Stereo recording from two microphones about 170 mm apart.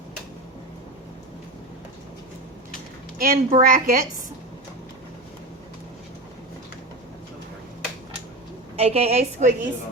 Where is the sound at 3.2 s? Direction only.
55° right (ahead or behind).